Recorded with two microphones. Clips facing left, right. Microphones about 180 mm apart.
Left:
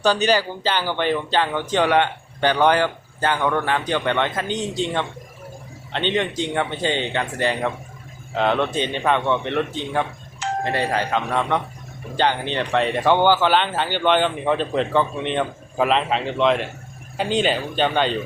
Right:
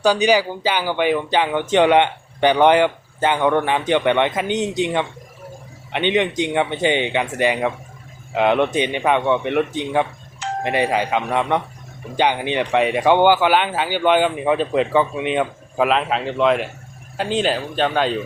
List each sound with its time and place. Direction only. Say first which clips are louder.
0.0 s speech: right 3 dB; 10° right (ahead or behind)
5.9 s speech: right 4 dB; 15° right (ahead or behind)